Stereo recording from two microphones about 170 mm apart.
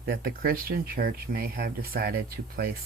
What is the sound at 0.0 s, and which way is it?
Speech, 60° right (ahead or behind).